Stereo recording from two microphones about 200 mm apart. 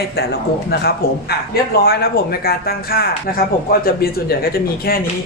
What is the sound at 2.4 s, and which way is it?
Speech, 50° left (ahead or behind).